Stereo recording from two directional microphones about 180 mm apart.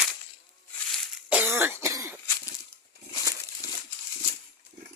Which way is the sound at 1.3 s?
10° right (ahead or behind).